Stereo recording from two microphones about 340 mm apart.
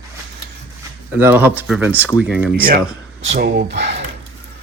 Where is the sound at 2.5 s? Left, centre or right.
Right.